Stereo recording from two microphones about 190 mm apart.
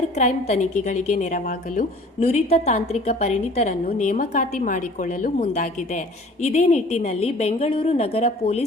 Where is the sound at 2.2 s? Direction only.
35° left (ahead or behind).